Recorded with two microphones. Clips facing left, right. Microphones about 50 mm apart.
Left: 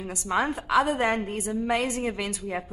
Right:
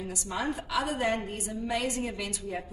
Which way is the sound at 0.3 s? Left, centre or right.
Left.